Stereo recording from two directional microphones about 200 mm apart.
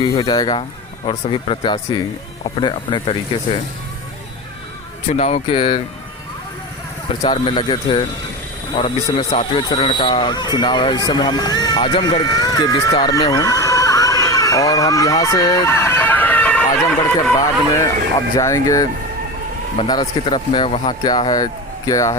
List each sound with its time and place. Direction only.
0.0 s speech: 25° left (ahead or behind)
5.0 s speech: 35° left (ahead or behind)
7.2 s speech: 25° left (ahead or behind); by 17.3 s 5° left (ahead or behind)
18.3 s speech: 15° left (ahead or behind)